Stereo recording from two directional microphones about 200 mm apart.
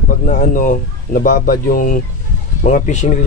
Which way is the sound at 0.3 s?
40° left (ahead or behind).